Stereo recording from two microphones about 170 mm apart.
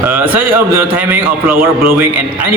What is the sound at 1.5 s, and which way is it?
Speech, 60° right (ahead or behind).